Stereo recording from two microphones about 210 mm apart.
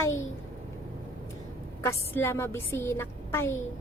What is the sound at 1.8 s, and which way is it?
A woman's voice, 10° left (ahead or behind).